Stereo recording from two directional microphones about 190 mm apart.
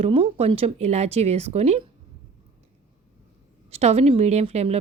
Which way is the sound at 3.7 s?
35° right (ahead or behind).